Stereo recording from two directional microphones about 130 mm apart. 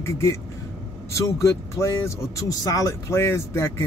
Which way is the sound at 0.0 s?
20° left (ahead or behind).